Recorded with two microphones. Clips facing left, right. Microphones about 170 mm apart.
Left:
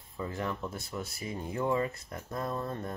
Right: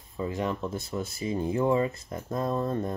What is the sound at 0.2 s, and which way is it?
Speech, 20° right (ahead or behind).